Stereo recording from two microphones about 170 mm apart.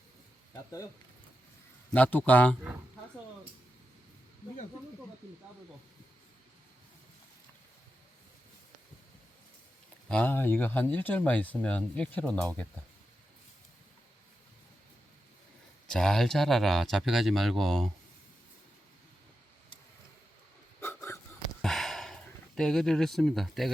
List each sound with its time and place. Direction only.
0.5 s speech: 20° left (ahead or behind)
1.9 s speech: 10° left (ahead or behind)
10.1 s speech: 10° left (ahead or behind)
15.9 s speech: 5° left (ahead or behind)
20.8 s wheeze: 15° left (ahead or behind)
21.6 s a sound: centre (ahead or behind)